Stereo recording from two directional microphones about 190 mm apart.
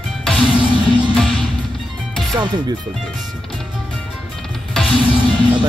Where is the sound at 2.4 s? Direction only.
25° right (ahead or behind).